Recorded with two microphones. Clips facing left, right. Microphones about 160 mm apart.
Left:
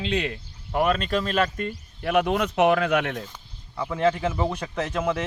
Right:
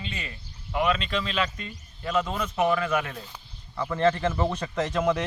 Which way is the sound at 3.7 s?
10° left (ahead or behind).